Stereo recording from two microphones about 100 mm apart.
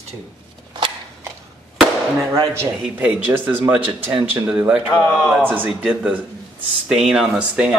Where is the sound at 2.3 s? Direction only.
25° right (ahead or behind).